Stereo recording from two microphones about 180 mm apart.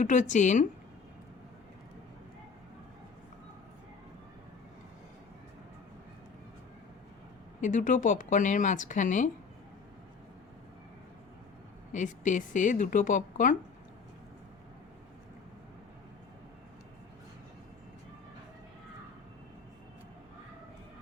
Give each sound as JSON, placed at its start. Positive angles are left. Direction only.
{"t": 0.0, "sound": "speech", "side_deg": 45}
{"t": 7.6, "sound": "speech", "side_deg": 45}
{"t": 11.9, "sound": "speech", "side_deg": 45}